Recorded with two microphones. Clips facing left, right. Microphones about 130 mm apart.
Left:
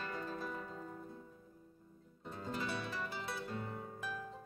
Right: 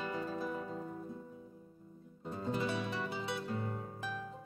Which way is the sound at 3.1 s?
Centre (ahead or behind).